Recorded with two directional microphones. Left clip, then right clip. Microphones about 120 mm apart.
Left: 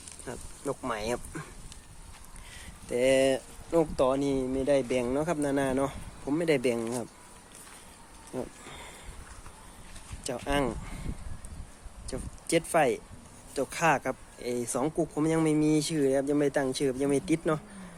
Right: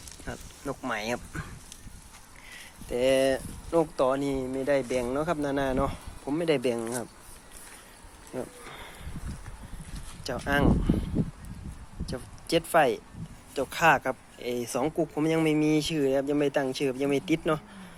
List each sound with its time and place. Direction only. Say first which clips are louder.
0.3 s speech: left 1 dB; 10° left (ahead or behind)
2.9 s speech: even; 15° left (ahead or behind)
8.6 s a sound: right 2 dB; 25° left (ahead or behind)
10.2 s speech: right 3 dB; 15° left (ahead or behind)
12.1 s speech: right 1 dB; 10° left (ahead or behind)